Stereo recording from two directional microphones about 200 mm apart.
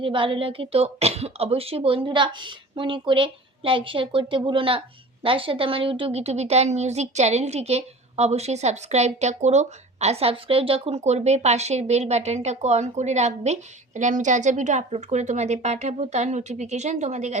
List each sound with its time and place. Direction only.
0.0 s a woman's voice: 25° right (ahead or behind)